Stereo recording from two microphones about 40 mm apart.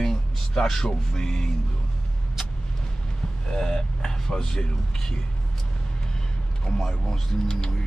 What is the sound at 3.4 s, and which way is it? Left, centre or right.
Speech, centre.